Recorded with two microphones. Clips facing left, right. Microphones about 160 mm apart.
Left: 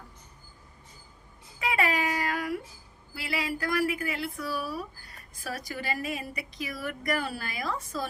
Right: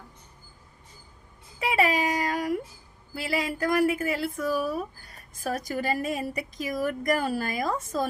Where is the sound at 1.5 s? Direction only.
35° right (ahead or behind).